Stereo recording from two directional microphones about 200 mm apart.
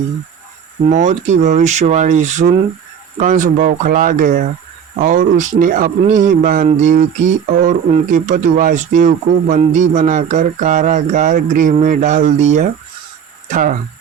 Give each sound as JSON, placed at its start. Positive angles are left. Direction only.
{"t": 0.9, "sound": "mantra", "side_deg": -40}